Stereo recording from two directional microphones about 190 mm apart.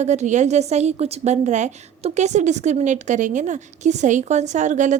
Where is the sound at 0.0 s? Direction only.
35° right (ahead or behind).